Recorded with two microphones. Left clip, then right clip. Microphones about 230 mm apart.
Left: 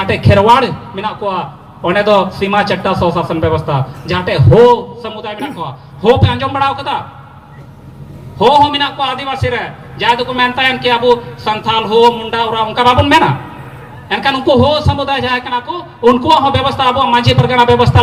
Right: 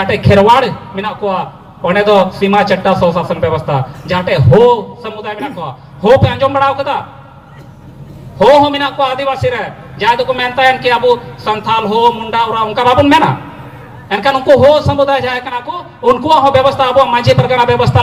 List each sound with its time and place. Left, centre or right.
0.0 s a man's voice: left
8.4 s a man's voice: left